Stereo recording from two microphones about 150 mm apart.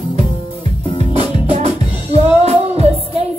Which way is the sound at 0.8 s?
35° left (ahead or behind).